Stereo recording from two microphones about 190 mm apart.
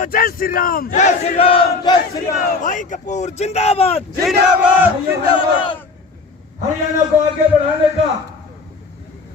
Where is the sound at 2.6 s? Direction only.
45° left (ahead or behind).